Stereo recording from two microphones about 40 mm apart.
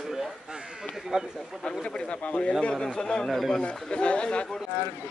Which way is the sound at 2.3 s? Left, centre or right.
Left.